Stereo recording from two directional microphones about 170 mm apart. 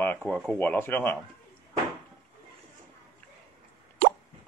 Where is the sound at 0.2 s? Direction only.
5° left (ahead or behind).